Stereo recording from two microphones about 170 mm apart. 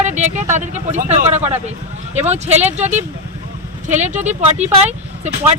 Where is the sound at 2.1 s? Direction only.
40° right (ahead or behind).